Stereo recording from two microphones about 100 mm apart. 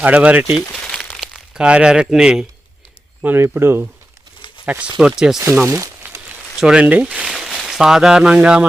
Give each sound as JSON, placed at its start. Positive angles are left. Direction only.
{"t": 0.0, "sound": "speech", "side_deg": -15}
{"t": 0.8, "sound": "crumpling", "side_deg": 10}
{"t": 1.3, "sound": "speech", "side_deg": -10}
{"t": 3.2, "sound": "speech", "side_deg": -20}
{"t": 4.4, "sound": "crumpling", "side_deg": 55}
{"t": 4.6, "sound": "speech", "side_deg": -10}
{"t": 5.6, "sound": "a sound", "side_deg": -25}
{"t": 6.2, "sound": "a sound", "side_deg": -10}
{"t": 7.3, "sound": "speech", "side_deg": 0}